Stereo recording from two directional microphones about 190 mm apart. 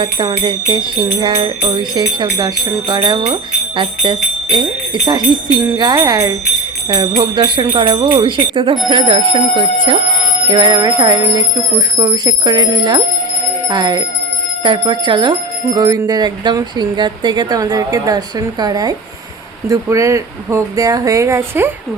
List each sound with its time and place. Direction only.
0.0 s speech: 25° right (ahead or behind)